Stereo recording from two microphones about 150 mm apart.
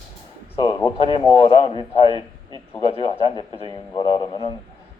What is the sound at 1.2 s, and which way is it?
A man's voice, 35° left (ahead or behind).